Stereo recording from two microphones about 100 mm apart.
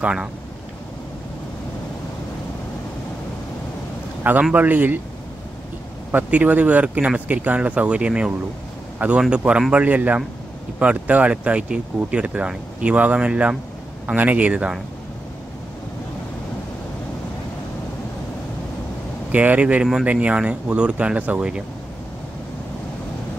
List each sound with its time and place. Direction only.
0.0 s speech: 10° right (ahead or behind)
4.2 s speech: 15° right (ahead or behind)
6.1 s speech: 15° right (ahead or behind)
19.3 s speech: 15° right (ahead or behind)